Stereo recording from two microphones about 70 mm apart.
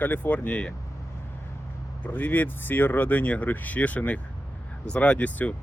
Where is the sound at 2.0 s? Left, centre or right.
Left.